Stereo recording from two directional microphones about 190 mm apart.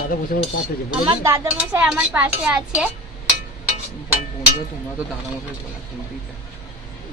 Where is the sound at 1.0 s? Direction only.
15° right (ahead or behind).